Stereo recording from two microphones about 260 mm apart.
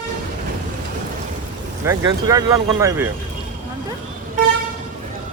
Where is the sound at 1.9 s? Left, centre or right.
Centre.